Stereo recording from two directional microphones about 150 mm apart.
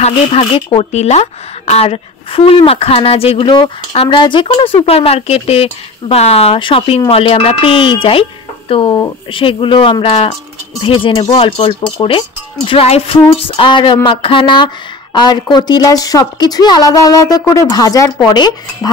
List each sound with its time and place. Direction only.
0.0 s speech: 40° left (ahead or behind)